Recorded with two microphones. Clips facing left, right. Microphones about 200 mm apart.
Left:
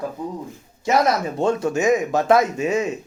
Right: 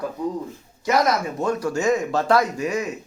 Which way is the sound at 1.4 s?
25° left (ahead or behind).